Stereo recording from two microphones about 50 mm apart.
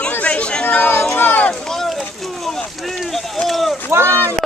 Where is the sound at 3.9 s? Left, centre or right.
Right.